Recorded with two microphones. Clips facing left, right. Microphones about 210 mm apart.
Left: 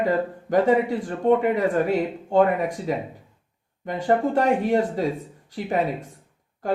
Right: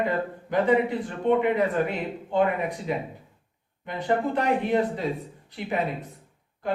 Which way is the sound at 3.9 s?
45° left (ahead or behind).